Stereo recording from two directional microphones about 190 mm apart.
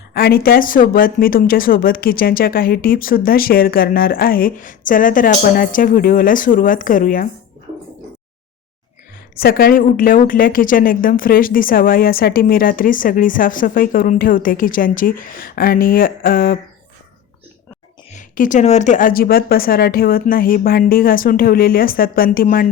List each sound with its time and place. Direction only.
0.1 s a woman's voice: 50° left (ahead or behind)
9.3 s a woman's voice: 55° left (ahead or behind)
18.1 s a woman's voice: 40° left (ahead or behind)